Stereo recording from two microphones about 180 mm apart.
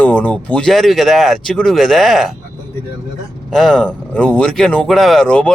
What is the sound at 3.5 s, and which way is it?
Speech, centre (ahead or behind).